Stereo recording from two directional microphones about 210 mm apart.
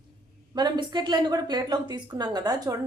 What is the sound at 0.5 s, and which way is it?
A woman's voice, 20° right (ahead or behind).